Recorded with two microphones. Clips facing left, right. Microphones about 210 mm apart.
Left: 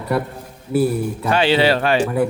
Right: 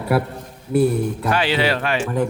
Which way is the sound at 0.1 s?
5° right (ahead or behind).